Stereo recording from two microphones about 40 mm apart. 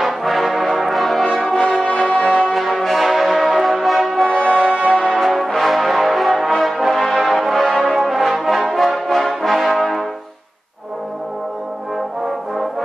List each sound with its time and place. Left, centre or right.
0.0 s brass instrument: centre
1.6 s brass instrument: left
1.9 s music: left
2.4 s music: centre
4.3 s brass instrument: left
4.9 s brass instrument: centre
5.2 s music: centre
7.7 s brass instrument: centre